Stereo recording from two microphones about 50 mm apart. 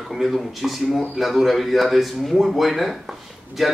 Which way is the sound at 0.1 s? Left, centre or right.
Centre.